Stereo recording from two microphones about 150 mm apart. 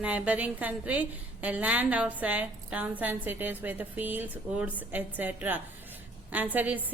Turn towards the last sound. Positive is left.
turn(degrees=-10)  # may be behind; listen again after turning